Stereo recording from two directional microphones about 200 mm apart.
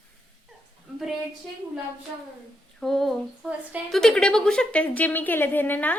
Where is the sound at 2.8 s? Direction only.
Centre (ahead or behind).